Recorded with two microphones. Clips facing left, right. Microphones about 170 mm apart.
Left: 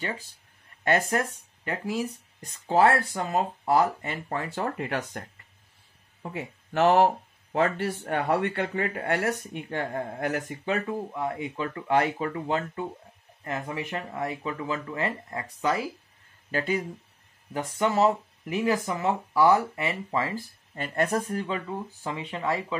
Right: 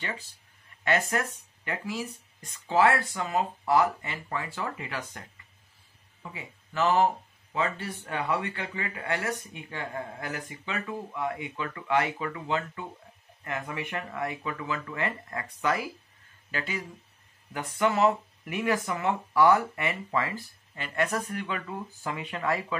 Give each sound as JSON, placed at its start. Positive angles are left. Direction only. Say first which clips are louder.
{"t": 0.8, "sound": "speech", "louder": "left 3 dB", "side_deg": 45}
{"t": 2.0, "sound": "speech", "louder": "left 5 dB", "side_deg": 50}
{"t": 6.2, "sound": "speech", "louder": "left 7 dB", "side_deg": 60}
{"t": 8.0, "sound": "speech", "louder": "left 4 dB", "side_deg": 50}
{"t": 16.5, "sound": "speech", "louder": "left 7 dB", "side_deg": 40}
{"t": 20.7, "sound": "speech", "louder": "left 3 dB", "side_deg": 45}
{"t": 21.3, "sound": "speech", "louder": "left 4 dB", "side_deg": 30}